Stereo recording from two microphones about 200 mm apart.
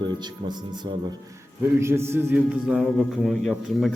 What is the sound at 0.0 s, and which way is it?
Speech, 20° right (ahead or behind).